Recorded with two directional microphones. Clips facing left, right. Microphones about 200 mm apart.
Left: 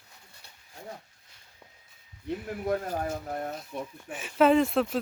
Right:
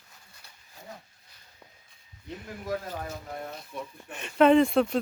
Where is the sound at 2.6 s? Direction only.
50° left (ahead or behind).